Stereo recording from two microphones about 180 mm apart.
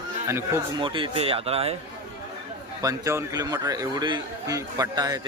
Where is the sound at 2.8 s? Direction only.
15° right (ahead or behind).